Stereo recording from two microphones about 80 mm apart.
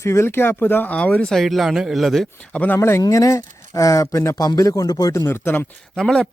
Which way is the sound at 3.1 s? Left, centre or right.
Left.